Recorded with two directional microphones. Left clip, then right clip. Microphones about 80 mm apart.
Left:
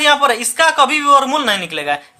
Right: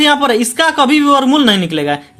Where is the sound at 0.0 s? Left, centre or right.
Right.